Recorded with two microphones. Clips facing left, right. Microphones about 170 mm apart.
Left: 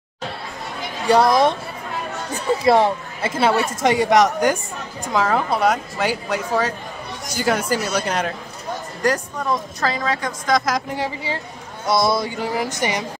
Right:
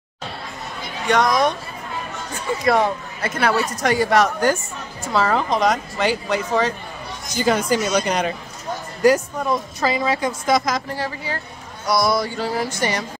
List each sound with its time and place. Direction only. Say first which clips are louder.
1.0 s music: left 3 dB; 30° left (ahead or behind)
2.6 s music: left 2 dB; 25° left (ahead or behind)
5.0 s a woman's voice: even; 15° left (ahead or behind); by 10.6 s 10° right (ahead or behind)
10.6 s speech: left 1 dB; 10° left (ahead or behind)
11.8 s music: even; 25° left (ahead or behind)